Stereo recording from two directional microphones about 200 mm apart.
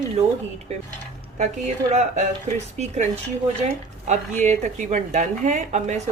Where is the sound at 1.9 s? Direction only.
35° right (ahead or behind).